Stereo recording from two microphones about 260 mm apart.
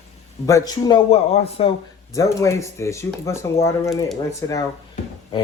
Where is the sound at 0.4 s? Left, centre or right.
Centre.